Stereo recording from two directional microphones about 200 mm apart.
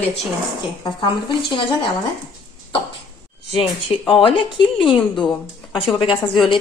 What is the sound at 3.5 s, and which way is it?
Speech, 25° left (ahead or behind).